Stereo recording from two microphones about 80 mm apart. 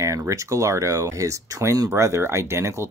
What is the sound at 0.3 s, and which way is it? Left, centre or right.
Speech, right.